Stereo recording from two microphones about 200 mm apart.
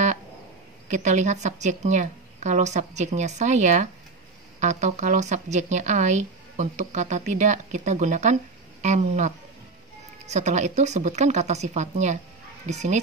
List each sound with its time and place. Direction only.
0.8 s speech: 35° right (ahead or behind)